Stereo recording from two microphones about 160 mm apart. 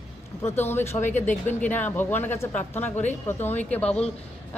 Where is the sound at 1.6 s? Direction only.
10° left (ahead or behind).